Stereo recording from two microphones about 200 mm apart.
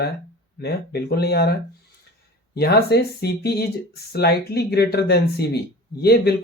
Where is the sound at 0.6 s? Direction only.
50° left (ahead or behind).